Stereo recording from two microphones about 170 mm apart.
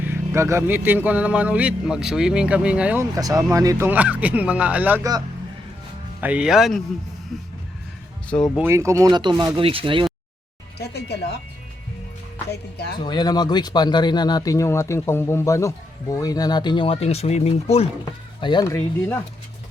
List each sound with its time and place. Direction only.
0.0 s speech: 15° right (ahead or behind)
3.2 s speech: 20° right (ahead or behind)
6.1 s speech: 10° right (ahead or behind)
8.5 s speech: 15° right (ahead or behind); by 10.1 s 30° right (ahead or behind)
10.8 s music: 75° left (ahead or behind)
12.5 s speech: 75° left (ahead or behind)
13.0 s speech: 25° left (ahead or behind)
18.0 s speech: 30° left (ahead or behind)
18.6 s speech: 15° left (ahead or behind)